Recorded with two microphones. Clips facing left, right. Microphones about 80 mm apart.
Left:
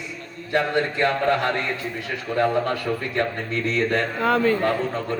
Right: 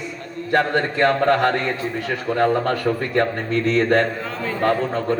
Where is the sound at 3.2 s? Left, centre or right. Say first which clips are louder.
Right 4 dB; right.